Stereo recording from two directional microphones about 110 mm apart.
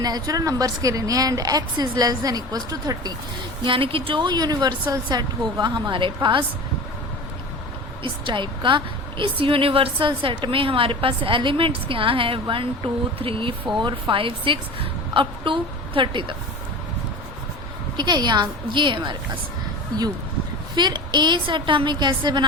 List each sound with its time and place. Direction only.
0.0 s a woman's voice: 35° right (ahead or behind)
3.7 s a woman's voice: 55° right (ahead or behind)
8.0 s a woman's voice: 50° right (ahead or behind)
17.9 s a woman's voice: 40° right (ahead or behind)
20.7 s a woman's voice: 40° right (ahead or behind)